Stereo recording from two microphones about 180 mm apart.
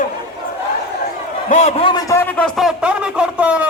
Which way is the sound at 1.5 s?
40° left (ahead or behind).